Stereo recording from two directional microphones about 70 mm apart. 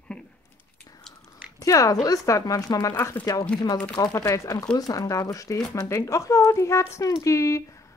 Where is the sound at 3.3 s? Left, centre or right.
Left.